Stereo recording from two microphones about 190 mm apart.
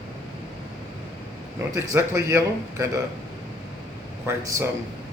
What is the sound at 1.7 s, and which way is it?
Speech, 15° right (ahead or behind).